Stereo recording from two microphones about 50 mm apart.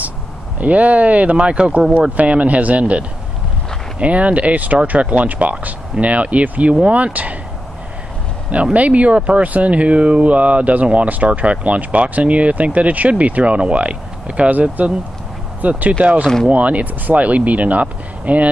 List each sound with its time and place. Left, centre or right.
0.6 s speech: right
8.7 s speech: right